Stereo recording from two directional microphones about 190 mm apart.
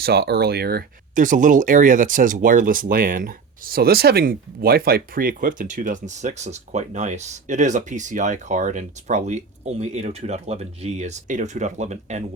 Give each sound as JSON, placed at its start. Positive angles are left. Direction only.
{"t": 0.0, "sound": "speech", "side_deg": -55}